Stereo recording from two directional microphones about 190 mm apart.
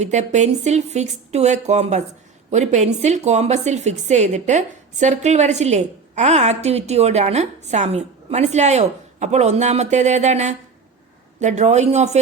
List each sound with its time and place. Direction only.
0.0 s a woman's voice: 35° right (ahead or behind)